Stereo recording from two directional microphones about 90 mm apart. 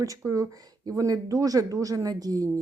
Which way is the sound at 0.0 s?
40° right (ahead or behind).